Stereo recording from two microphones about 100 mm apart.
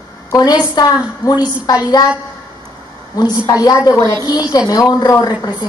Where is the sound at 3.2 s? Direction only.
40° left (ahead or behind).